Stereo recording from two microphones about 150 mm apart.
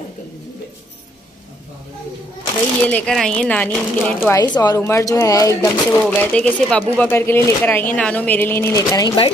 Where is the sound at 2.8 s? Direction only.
5° left (ahead or behind).